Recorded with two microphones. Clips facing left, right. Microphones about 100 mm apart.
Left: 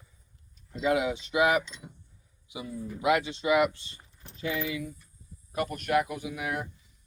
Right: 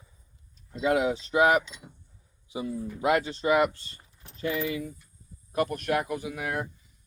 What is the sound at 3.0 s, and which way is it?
Speech, 40° right (ahead or behind).